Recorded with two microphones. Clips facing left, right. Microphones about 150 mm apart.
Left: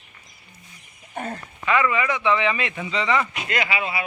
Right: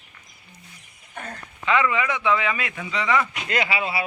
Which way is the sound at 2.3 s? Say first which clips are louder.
Left 2 dB; 5° right (ahead or behind).